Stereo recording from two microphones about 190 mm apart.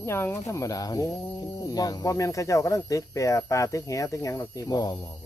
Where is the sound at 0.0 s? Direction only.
15° left (ahead or behind).